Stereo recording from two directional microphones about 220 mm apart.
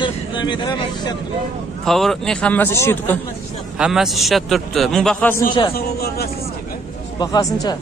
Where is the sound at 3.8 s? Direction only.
Centre (ahead or behind).